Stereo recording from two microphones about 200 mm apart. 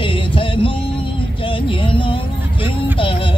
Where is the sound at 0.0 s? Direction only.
25° left (ahead or behind).